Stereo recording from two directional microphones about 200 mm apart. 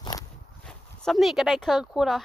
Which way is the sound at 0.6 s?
Centre (ahead or behind).